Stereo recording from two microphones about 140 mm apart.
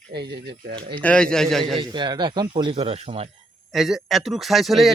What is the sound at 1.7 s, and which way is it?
Speech, 35° right (ahead or behind).